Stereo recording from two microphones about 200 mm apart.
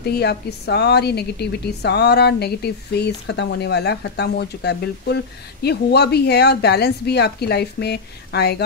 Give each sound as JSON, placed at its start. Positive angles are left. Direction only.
{"t": 0.0, "sound": "a woman's voice", "side_deg": 55}